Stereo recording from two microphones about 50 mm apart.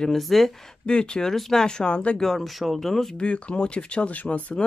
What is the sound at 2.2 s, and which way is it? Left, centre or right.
Speech, centre.